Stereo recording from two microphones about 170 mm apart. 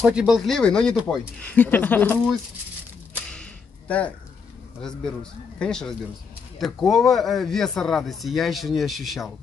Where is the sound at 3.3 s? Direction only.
5° left (ahead or behind).